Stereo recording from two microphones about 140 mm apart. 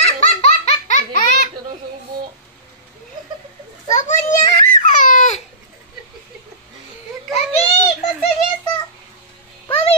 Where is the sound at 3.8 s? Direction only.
60° left (ahead or behind).